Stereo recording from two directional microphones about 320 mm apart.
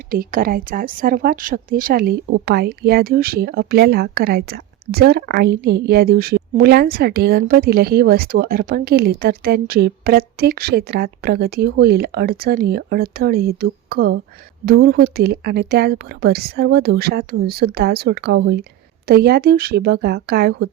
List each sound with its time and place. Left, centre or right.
0.1 s speech: right